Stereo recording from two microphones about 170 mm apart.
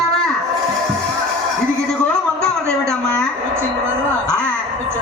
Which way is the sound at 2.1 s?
5° left (ahead or behind).